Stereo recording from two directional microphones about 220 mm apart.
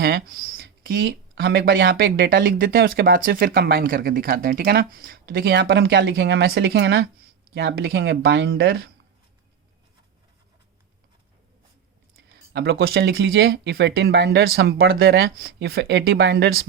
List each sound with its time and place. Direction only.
0.0 s speech: 50° right (ahead or behind)
5.6 s speech: 55° right (ahead or behind)
12.5 s speech: 50° right (ahead or behind)